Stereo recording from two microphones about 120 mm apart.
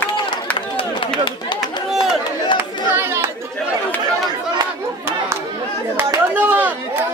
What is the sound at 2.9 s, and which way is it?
Chatter, 20° right (ahead or behind).